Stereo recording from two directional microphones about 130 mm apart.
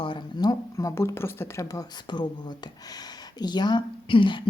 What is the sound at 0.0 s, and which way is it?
Speech, 35° left (ahead or behind).